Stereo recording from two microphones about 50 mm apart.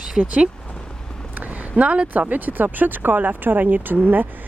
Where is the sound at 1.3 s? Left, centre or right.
Right.